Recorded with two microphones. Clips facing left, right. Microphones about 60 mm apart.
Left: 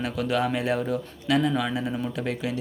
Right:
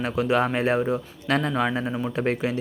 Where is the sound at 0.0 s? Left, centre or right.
Right.